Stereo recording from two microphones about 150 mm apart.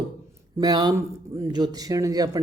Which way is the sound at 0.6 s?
25° right (ahead or behind).